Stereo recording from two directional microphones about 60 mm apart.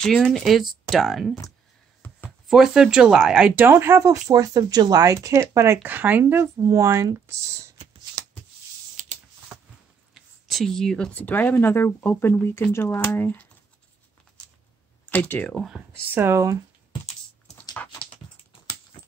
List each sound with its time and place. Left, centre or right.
0.0 s speech: centre
2.0 s chopping: left
2.4 s speech: centre
3.7 s speech: right
4.0 s speech: right
5.1 s speech: right
5.9 s speech: right
6.6 s speech: right
10.1 s a sound: centre
11.1 s speech: left
13.0 s speech: left
15.0 s speech: left
16.3 s speech: right